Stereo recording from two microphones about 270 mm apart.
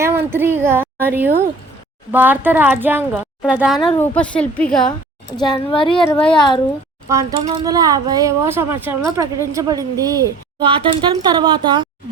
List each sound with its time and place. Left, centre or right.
0.0 s a woman's voice: centre
5.4 s a woman's voice: centre
6.0 s a woman's voice: centre
7.1 s speech: centre